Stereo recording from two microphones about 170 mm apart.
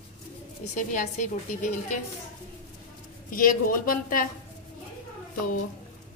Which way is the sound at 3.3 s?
55° left (ahead or behind).